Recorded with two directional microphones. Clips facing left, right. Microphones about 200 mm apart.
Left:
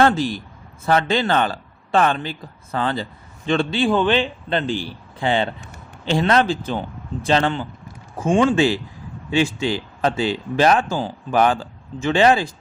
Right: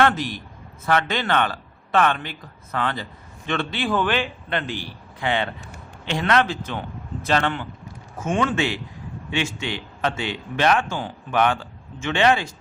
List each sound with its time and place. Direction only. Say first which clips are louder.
0.0 s a man's voice: left 3 dB; 30° left (ahead or behind)